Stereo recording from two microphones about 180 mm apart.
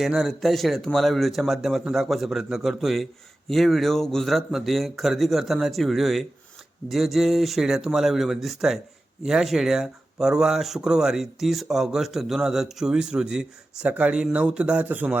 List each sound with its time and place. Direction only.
0.0 s speech: centre (ahead or behind)